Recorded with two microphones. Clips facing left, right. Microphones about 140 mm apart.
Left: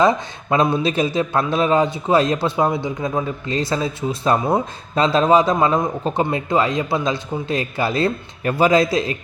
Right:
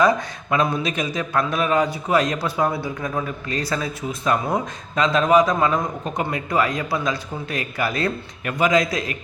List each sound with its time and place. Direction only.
0.0 s a man's voice: 25° left (ahead or behind)